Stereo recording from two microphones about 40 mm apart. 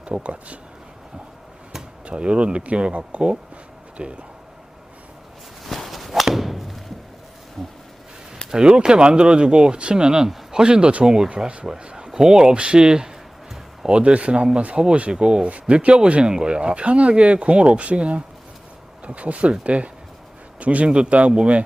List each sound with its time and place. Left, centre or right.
0.0 s speech: right
2.0 s speech: right
5.6 s a sound: centre
8.4 s speech: right